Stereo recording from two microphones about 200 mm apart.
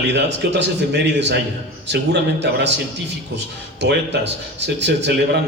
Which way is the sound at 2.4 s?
60° right (ahead or behind).